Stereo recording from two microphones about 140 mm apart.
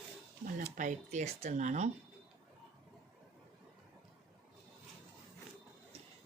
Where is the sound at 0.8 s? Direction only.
60° right (ahead or behind).